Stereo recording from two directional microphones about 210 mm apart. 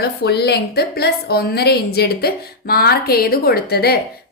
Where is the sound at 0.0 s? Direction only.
50° left (ahead or behind).